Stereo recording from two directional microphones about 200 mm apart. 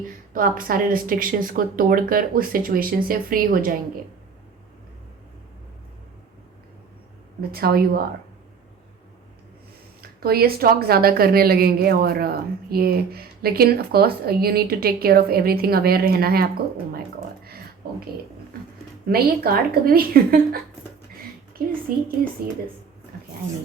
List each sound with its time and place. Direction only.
0.3 s a woman's voice: 45° right (ahead or behind)
7.5 s a woman's voice: 50° right (ahead or behind)
10.0 s a woman's voice: 50° right (ahead or behind)
19.0 s a woman's voice: 50° right (ahead or behind)
21.2 s a sound: 45° right (ahead or behind)